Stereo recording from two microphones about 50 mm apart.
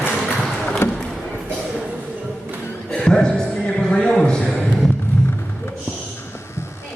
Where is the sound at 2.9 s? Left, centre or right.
Centre.